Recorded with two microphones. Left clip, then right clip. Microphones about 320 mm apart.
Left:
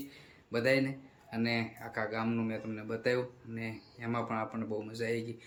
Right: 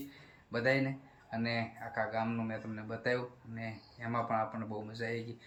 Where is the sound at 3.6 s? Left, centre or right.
Centre.